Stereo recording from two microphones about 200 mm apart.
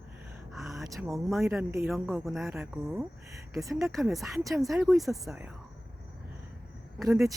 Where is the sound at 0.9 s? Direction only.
15° right (ahead or behind).